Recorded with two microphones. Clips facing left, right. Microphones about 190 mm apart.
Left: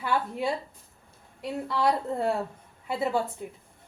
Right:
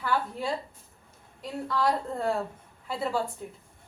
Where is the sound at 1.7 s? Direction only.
10° left (ahead or behind).